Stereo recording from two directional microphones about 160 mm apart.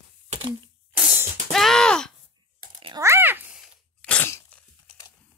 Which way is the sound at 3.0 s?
15° right (ahead or behind).